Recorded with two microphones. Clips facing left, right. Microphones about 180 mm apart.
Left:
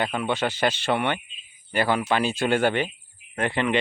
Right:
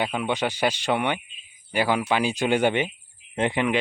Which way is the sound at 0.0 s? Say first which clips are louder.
Even; 10° right (ahead or behind).